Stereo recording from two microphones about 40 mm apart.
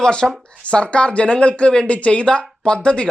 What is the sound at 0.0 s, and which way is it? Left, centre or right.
Speech, centre.